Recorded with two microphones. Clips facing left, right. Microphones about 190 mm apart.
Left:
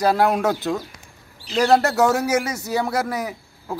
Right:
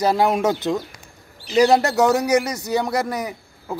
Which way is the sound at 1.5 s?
15° right (ahead or behind).